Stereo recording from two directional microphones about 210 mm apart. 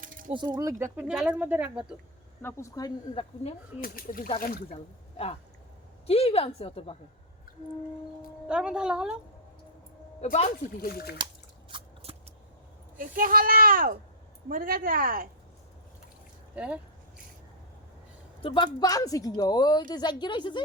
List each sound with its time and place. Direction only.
0.0 s a sound: 40° right (ahead or behind)
0.3 s speech: 20° right (ahead or behind)
0.8 s speech: 5° right (ahead or behind)
2.4 s speech: 10° left (ahead or behind)
3.8 s speech: 45° left (ahead or behind)
4.7 s speech: 30° left (ahead or behind)
8.4 s a woman's voice: 5° right (ahead or behind)
10.3 s speech: 30° left (ahead or behind)
10.8 s speech: 45° left (ahead or behind)
11.7 s biting: 25° right (ahead or behind)
13.0 s speech: 40° right (ahead or behind)
16.6 s a woman's voice: 5° right (ahead or behind)
18.4 s speech: 25° left (ahead or behind)